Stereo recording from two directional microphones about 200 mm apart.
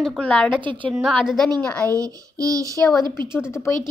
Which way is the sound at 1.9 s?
15° right (ahead or behind).